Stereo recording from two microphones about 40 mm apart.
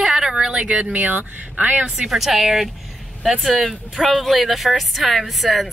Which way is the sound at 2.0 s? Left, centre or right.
Centre.